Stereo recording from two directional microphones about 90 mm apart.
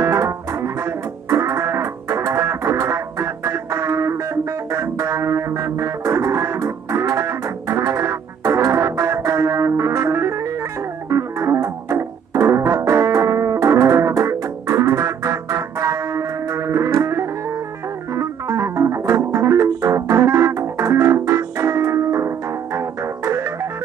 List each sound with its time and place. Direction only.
0.0 s music: 30° right (ahead or behind)